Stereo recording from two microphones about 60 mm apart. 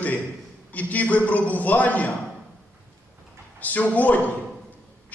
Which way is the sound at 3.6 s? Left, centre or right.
Left.